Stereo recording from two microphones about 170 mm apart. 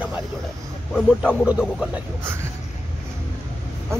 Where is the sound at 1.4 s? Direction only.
5° right (ahead or behind).